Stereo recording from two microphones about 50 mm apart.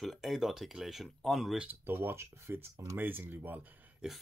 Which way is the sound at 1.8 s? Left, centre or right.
Right.